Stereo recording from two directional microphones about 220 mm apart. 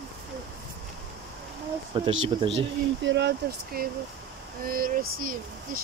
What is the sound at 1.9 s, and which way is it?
Speech, 25° right (ahead or behind).